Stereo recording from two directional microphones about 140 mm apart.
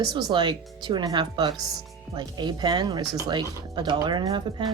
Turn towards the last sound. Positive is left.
turn(degrees=-30)  # may be behind; listen again after turning